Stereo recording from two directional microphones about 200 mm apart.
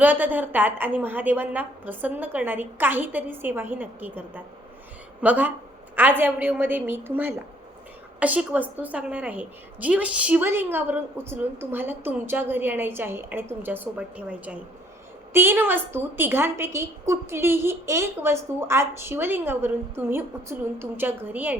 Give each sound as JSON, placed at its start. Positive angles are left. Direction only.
{"t": 0.0, "sound": "a woman's voice", "side_deg": -10}